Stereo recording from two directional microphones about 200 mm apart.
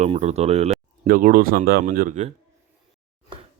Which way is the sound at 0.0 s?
35° right (ahead or behind).